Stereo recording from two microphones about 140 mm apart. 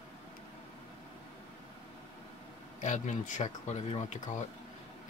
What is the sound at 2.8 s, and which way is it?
Speech, 60° left (ahead or behind).